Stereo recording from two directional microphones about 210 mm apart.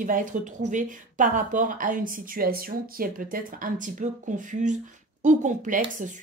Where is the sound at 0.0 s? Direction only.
40° right (ahead or behind).